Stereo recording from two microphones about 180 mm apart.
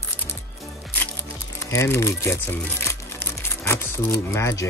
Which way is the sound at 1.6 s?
15° left (ahead or behind).